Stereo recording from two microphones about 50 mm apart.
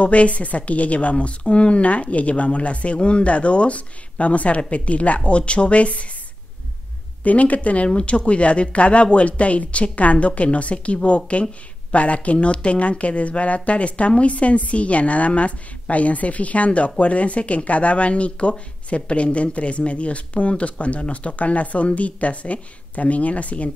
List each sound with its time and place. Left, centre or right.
0.0 s speech: left
7.2 s speech: left